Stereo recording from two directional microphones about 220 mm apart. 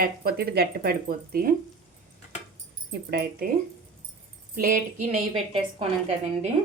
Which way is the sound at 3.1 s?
45° right (ahead or behind).